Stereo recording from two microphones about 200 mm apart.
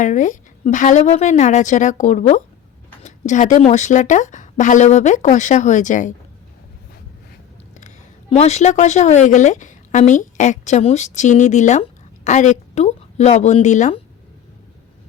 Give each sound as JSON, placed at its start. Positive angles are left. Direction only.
{"t": 0.0, "sound": "speech", "side_deg": 40}
{"t": 7.8, "sound": "a woman's voice", "side_deg": 35}